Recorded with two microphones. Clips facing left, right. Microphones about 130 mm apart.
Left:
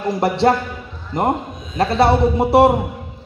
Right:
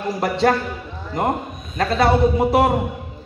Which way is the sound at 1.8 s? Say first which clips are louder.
Left 3 dB; 25° left (ahead or behind).